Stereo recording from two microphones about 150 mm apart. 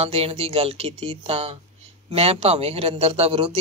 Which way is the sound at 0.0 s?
40° right (ahead or behind).